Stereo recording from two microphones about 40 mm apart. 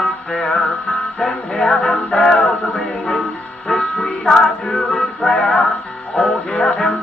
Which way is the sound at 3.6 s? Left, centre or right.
Centre.